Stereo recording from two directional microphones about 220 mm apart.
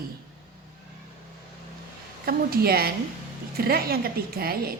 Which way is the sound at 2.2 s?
45° right (ahead or behind).